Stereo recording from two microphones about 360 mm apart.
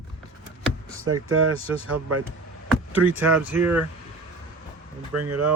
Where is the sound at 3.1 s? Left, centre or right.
Centre.